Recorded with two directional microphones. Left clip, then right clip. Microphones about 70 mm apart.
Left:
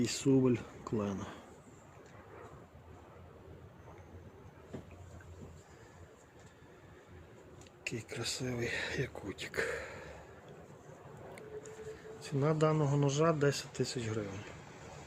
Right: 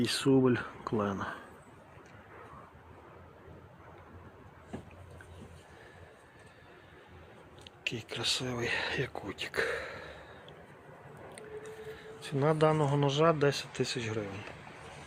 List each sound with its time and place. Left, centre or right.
0.0 s speech: centre
7.9 s speech: centre
11.3 s speech: centre